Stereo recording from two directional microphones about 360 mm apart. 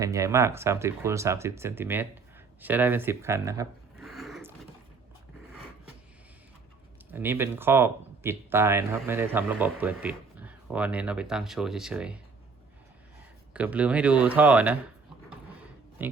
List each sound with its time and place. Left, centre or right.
0.0 s speech: centre
2.6 s a sound: centre
7.1 s speech: centre
13.5 s speech: centre
16.0 s speech: centre